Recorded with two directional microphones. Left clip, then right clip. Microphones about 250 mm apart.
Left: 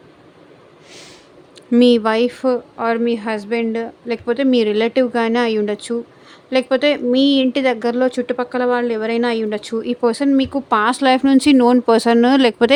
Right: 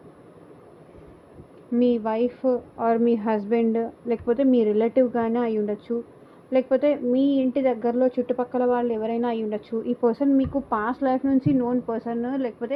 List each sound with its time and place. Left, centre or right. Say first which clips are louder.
1.7 s a woman's voice: left 9 dB; left
11.2 s speech: left 10 dB; left